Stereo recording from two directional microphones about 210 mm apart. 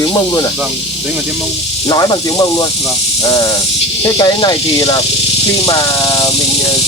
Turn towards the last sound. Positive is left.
turn(degrees=20)  # may be behind; listen again after turning